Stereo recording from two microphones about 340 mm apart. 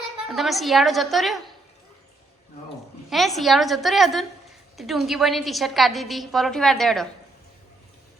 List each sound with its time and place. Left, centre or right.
0.3 s a woman's voice: centre
3.1 s a woman's voice: centre